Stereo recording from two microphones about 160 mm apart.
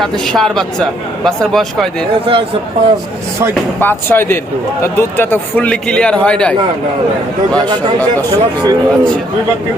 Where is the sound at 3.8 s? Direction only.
15° left (ahead or behind).